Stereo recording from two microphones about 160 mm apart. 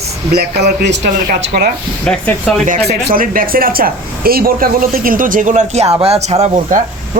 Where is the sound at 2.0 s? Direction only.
5° left (ahead or behind).